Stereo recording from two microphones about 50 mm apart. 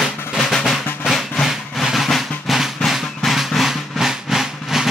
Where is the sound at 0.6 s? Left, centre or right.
Centre.